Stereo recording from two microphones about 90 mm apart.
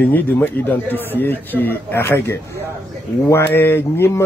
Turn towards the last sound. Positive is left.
turn(degrees=25)  # may be behind; listen again after turning